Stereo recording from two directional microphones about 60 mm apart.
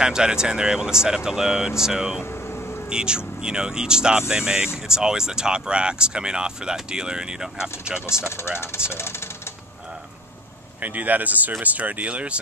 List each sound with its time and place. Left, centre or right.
0.0 s speech: centre
2.2 s vehicle: left
2.9 s speech: centre
8.1 s speech: left
10.8 s speech: right